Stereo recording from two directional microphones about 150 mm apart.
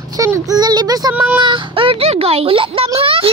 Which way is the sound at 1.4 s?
35° right (ahead or behind).